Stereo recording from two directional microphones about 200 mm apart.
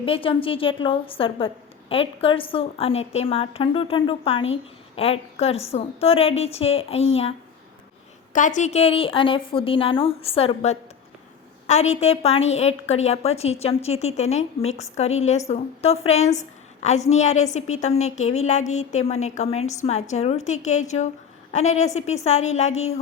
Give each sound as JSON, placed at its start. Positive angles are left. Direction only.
{"t": 0.0, "sound": "a woman's voice", "side_deg": 25}